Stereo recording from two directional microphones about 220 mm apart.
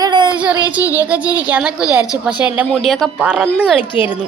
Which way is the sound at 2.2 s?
5° right (ahead or behind).